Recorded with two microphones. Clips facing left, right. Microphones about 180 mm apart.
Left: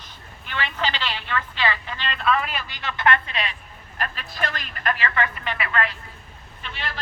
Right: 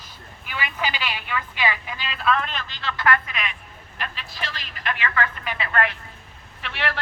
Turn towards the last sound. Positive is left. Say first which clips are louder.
# right 6 dB
turn(degrees=-70)  # may be behind; listen again after turning